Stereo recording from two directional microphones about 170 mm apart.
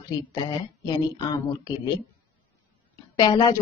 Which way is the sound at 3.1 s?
25° left (ahead or behind).